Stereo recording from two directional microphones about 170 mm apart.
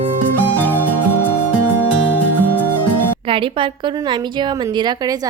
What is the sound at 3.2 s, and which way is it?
A woman's voice, 30° right (ahead or behind).